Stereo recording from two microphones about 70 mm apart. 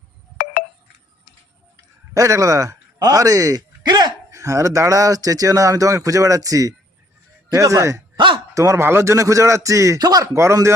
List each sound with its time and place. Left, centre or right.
2.1 s speech: right
3.8 s speech: right
4.3 s speech: right
10.0 s speech: right
10.3 s speech: right